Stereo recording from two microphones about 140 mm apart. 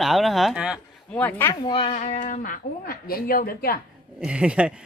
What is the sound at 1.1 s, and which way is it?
Speech, 10° left (ahead or behind).